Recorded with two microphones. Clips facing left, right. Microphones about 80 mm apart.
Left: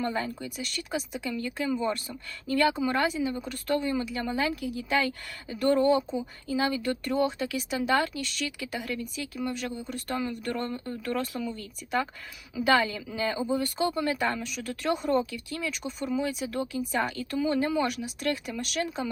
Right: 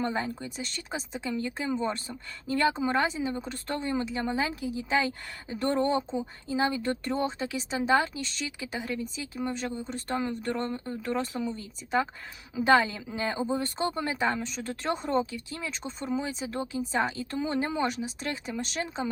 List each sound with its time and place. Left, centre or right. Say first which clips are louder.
0.0 s speech: even; right
12.5 s speech: right 1 dB; right